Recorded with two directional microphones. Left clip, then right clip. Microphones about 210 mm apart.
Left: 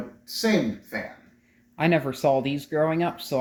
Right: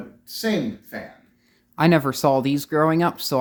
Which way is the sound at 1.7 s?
35° right (ahead or behind).